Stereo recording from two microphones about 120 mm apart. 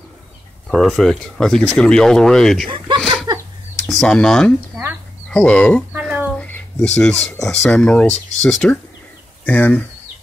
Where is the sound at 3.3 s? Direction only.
35° right (ahead or behind).